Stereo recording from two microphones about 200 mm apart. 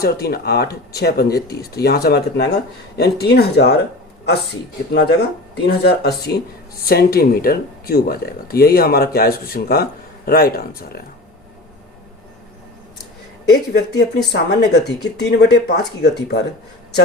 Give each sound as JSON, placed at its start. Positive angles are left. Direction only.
{"t": 0.0, "sound": "speech", "side_deg": 50}
{"t": 4.9, "sound": "speech", "side_deg": 55}
{"t": 13.4, "sound": "speech", "side_deg": 55}